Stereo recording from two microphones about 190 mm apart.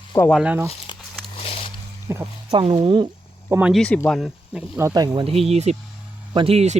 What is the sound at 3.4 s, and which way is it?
Speech, 10° right (ahead or behind).